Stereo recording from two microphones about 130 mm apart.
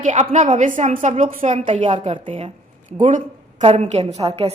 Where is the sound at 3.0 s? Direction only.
75° right (ahead or behind).